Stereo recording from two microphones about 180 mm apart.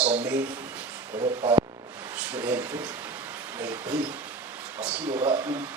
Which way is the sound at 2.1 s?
10° right (ahead or behind).